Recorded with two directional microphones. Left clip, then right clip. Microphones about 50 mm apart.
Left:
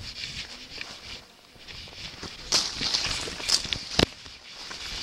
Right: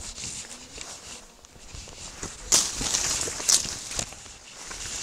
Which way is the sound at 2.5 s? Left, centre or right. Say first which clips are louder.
Right 1 dB; right.